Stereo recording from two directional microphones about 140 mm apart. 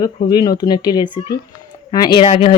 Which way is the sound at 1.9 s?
30° left (ahead or behind).